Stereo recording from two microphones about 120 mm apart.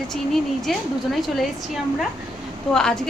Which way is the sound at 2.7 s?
5° left (ahead or behind).